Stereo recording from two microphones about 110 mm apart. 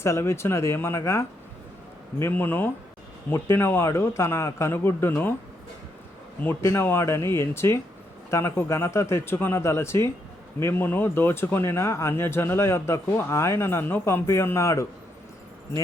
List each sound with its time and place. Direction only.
0.0 s speech: 25° left (ahead or behind)
6.4 s speech: 25° left (ahead or behind)